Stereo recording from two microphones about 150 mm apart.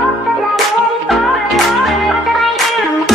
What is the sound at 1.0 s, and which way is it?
Music, centre (ahead or behind).